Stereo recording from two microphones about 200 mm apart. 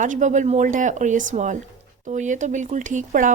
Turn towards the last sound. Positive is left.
turn(degrees=-40)  # may be behind; listen again after turning